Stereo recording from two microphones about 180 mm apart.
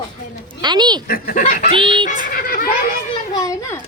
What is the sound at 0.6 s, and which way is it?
Speech, 25° right (ahead or behind).